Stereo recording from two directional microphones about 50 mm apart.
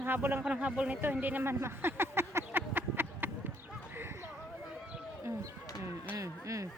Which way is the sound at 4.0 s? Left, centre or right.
Right.